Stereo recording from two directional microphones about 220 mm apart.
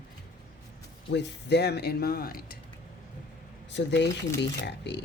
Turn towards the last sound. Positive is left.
turn(degrees=50)  # may be behind; listen again after turning